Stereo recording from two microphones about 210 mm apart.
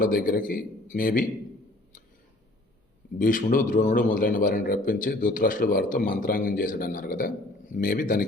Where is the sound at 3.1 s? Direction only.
40° left (ahead or behind).